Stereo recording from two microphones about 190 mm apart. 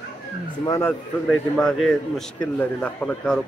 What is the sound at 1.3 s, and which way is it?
Speech, 5° left (ahead or behind).